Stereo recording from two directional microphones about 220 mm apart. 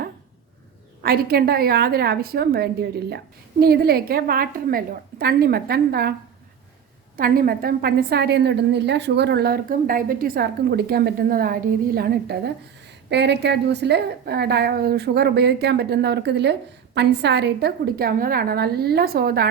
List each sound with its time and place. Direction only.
1.0 s a woman's voice: 45° right (ahead or behind)
7.2 s a woman's voice: 40° right (ahead or behind)